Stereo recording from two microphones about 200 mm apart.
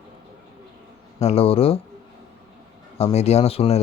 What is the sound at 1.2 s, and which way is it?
Speech, 30° left (ahead or behind).